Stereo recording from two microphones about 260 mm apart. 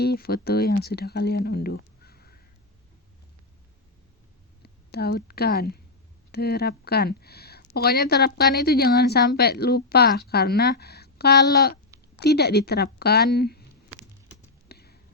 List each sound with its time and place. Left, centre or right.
0.0 s speech: left
4.6 s a woman's voice: left
14.7 s a sound: left